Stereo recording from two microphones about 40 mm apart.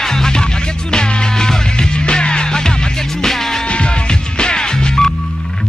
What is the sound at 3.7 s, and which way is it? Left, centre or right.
Music, left.